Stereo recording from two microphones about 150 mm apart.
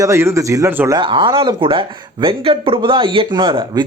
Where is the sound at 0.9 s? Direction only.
35° right (ahead or behind).